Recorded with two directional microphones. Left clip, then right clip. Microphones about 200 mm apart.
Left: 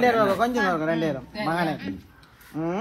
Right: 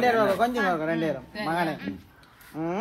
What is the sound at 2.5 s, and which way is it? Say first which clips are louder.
Speech: left 2 dB; 40° left (ahead or behind).